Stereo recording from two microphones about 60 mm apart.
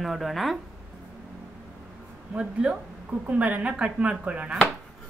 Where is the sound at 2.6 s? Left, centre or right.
Centre.